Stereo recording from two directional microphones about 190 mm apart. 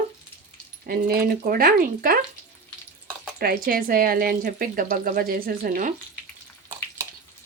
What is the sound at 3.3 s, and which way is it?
Speech, 50° right (ahead or behind).